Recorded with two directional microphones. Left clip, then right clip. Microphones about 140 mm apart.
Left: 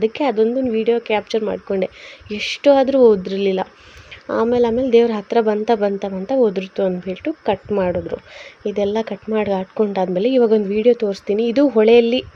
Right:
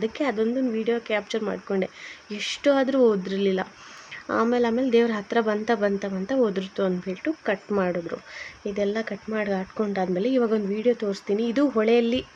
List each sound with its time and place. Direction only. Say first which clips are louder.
0.0 s speech: left 8 dB; 25° left (ahead or behind)